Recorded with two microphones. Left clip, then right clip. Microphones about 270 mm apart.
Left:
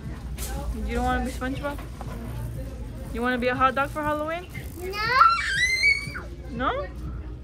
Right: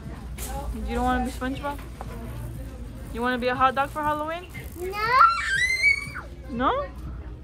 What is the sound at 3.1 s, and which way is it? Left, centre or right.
Speech, centre.